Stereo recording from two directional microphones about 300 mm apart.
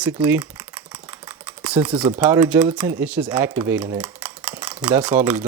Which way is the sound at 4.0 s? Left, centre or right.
Centre.